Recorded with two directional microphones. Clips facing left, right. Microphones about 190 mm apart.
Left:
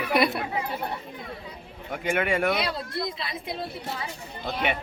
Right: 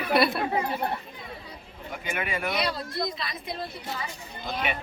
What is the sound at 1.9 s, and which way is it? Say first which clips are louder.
Speech: left 6 dB; 55° left (ahead or behind).